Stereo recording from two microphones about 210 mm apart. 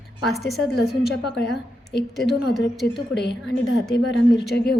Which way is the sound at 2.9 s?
55° left (ahead or behind).